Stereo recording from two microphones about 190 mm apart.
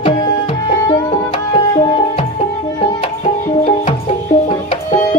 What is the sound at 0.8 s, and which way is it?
Music, 25° left (ahead or behind).